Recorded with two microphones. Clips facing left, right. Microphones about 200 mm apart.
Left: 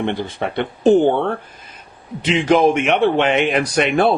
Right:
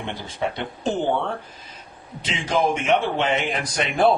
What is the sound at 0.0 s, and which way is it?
Speech, 60° left (ahead or behind).